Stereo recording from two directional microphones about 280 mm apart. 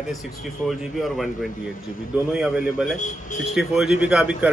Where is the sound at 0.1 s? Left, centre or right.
Centre.